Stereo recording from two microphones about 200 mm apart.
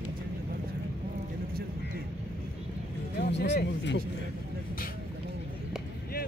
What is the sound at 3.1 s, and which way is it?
Speech, 60° left (ahead or behind).